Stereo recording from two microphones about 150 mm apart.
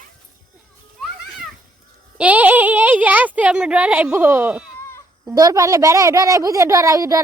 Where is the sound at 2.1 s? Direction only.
10° right (ahead or behind).